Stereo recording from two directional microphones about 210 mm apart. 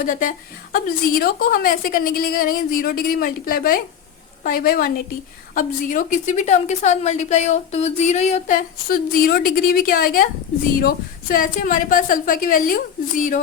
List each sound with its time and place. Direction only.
0.0 s a woman's voice: 40° left (ahead or behind)